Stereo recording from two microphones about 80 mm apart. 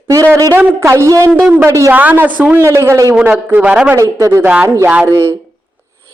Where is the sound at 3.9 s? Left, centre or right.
Right.